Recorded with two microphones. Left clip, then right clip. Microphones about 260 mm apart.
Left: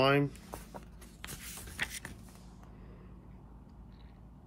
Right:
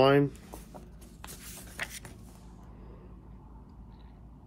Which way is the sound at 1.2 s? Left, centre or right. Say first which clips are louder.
Left 1 dB; centre.